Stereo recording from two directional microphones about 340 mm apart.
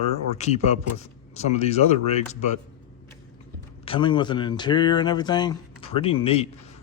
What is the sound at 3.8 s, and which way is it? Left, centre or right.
Speech, centre.